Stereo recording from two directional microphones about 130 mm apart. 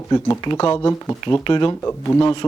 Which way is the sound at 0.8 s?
20° left (ahead or behind).